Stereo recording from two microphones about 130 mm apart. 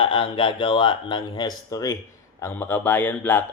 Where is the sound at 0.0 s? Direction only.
40° left (ahead or behind).